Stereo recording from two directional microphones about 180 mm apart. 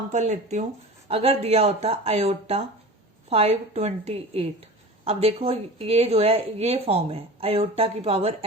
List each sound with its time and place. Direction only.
0.1 s a woman's voice: 40° right (ahead or behind)